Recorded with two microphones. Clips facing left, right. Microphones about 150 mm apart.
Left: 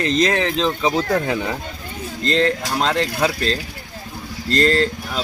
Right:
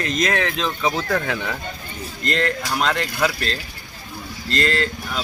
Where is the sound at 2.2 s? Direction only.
30° left (ahead or behind).